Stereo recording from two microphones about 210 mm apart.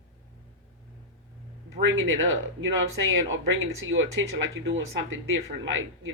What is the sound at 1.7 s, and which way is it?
Speech, 70° right (ahead or behind).